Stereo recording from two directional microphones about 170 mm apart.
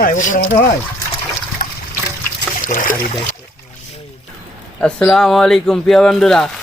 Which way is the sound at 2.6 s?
50° left (ahead or behind).